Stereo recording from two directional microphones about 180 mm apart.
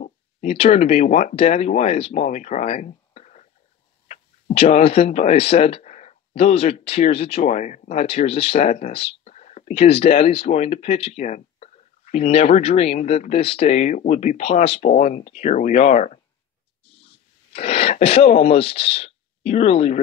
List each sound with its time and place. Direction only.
0.0 s speech: 35° left (ahead or behind)
16.8 s throat clearing: 30° left (ahead or behind)